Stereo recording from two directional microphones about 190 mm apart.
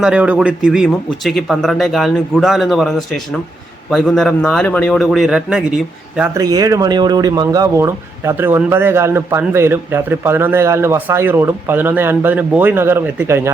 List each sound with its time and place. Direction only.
0.0 s speech: 5° right (ahead or behind)
6.3 s speech: 20° right (ahead or behind)